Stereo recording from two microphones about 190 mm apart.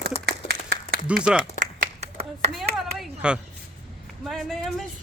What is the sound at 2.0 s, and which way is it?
Clapping, 35° right (ahead or behind).